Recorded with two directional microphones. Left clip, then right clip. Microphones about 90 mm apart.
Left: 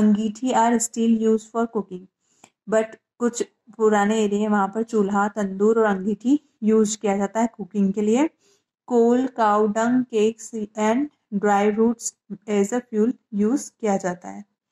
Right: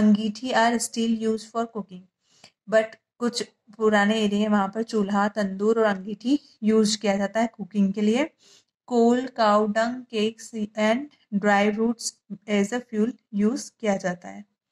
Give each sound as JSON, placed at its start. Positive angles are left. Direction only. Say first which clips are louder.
{"t": 0.0, "sound": "a woman's voice", "louder": "left 2 dB", "side_deg": 30}
{"t": 1.9, "sound": "a sound", "louder": "left 11 dB", "side_deg": 35}
{"t": 2.7, "sound": "a woman's voice", "louder": "even", "side_deg": 25}
{"t": 8.9, "sound": "speech", "louder": "left 3 dB", "side_deg": -25}
{"t": 9.2, "sound": "a woman's voice", "louder": "left 2 dB", "side_deg": 20}